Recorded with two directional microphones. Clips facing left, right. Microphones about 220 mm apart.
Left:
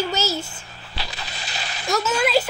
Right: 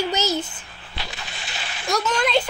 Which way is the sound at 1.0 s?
35° left (ahead or behind).